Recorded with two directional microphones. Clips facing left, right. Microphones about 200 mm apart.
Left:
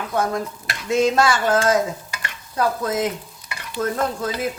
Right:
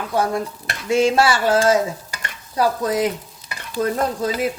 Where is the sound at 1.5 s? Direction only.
30° right (ahead or behind).